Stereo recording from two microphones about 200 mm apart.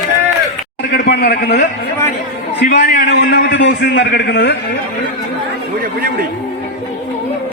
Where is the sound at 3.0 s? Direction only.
55° left (ahead or behind).